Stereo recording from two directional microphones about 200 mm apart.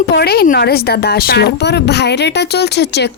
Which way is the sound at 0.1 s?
55° left (ahead or behind).